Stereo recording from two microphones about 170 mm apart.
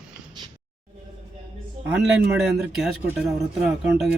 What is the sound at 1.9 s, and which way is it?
Speech, 5° right (ahead or behind).